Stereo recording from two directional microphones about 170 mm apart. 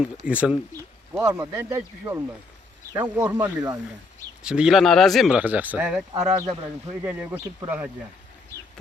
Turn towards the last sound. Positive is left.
turn(degrees=-10)  # may be behind; listen again after turning